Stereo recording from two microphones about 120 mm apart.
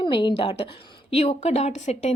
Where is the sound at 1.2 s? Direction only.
60° left (ahead or behind).